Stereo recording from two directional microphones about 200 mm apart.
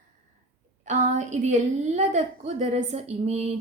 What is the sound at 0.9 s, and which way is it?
A woman's voice, 35° right (ahead or behind).